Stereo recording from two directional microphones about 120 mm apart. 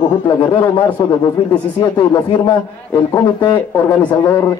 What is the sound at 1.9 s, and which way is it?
Speech, 40° left (ahead or behind).